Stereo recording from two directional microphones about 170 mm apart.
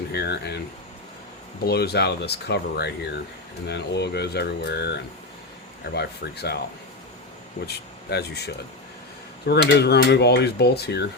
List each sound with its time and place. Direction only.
0.1 s speech: 75° left (ahead or behind)
1.6 s speech: 70° left (ahead or behind)
7.7 s speech: 75° left (ahead or behind)